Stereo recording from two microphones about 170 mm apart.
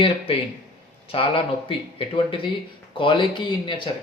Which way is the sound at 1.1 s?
30° left (ahead or behind).